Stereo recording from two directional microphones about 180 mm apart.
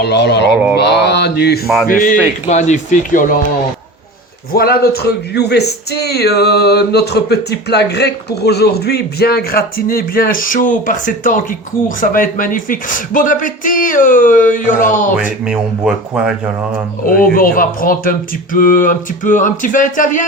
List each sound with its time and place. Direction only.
0.0 s mantra: 70° left (ahead or behind)
1.9 s music: 45° left (ahead or behind)
4.5 s speech: 60° left (ahead or behind)
15.1 s speech: 5° right (ahead or behind)
17.3 s music: 50° left (ahead or behind)